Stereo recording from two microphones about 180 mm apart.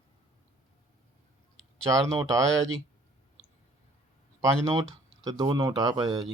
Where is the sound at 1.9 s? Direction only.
20° right (ahead or behind).